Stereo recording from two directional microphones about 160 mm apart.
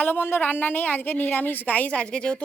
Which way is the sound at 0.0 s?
10° left (ahead or behind).